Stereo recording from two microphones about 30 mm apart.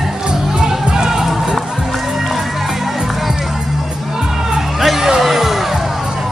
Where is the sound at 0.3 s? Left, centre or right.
Right.